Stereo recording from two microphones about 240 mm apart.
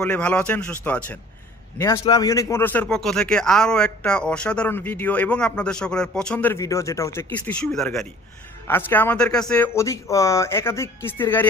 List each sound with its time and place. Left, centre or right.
0.0 s speech: centre